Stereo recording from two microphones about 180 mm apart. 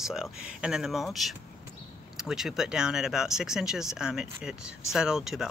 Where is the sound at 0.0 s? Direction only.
5° right (ahead or behind).